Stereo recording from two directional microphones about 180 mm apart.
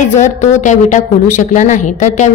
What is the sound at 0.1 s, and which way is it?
A woman's voice, 40° left (ahead or behind).